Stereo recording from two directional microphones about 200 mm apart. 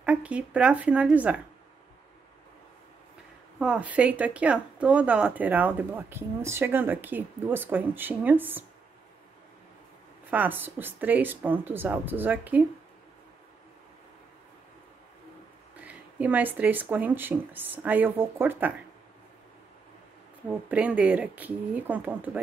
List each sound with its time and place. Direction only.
0.0 s speech: 5° right (ahead or behind)
3.5 s speech: 5° right (ahead or behind)
10.3 s speech: 10° right (ahead or behind)
15.7 s speech: 5° right (ahead or behind)
20.4 s speech: 5° right (ahead or behind)